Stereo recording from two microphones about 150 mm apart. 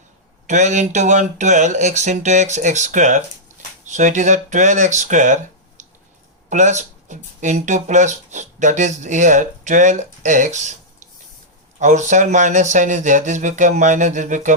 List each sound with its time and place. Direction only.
0.4 s speech: 50° right (ahead or behind)
11.8 s speech: 55° right (ahead or behind)